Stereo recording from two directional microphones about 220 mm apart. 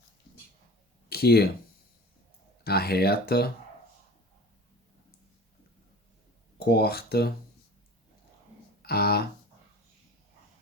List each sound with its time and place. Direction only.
1.1 s speech: 45° left (ahead or behind)
2.6 s speech: 45° left (ahead or behind)
6.6 s speech: 45° left (ahead or behind)
8.9 s speech: 45° left (ahead or behind)